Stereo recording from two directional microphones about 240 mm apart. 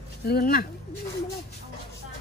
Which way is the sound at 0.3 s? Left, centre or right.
Left.